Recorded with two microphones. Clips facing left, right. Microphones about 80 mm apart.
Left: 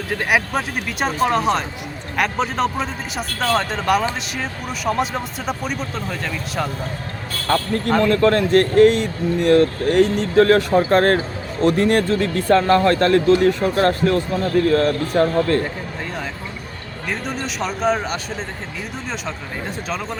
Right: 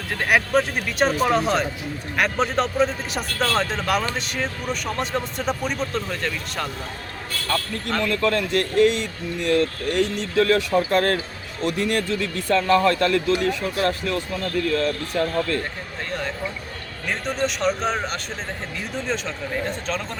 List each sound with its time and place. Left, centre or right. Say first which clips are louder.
0.1 s speech: even; centre
7.4 s speech: left 7 dB; left
17.1 s speech: right 1 dB; centre